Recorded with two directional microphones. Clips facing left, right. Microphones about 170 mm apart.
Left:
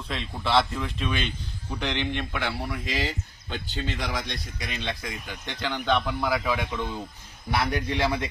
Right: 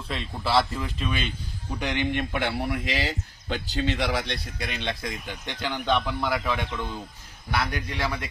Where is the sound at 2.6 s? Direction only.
60° right (ahead or behind); by 3.9 s 80° right.